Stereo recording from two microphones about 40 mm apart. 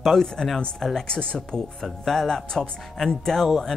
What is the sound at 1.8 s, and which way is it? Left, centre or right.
Speech, centre.